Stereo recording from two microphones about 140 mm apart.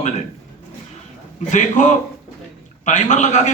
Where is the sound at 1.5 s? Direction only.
60° left (ahead or behind).